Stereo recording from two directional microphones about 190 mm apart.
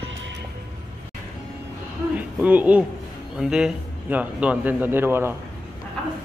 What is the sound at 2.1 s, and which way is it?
Hoot, 10° right (ahead or behind).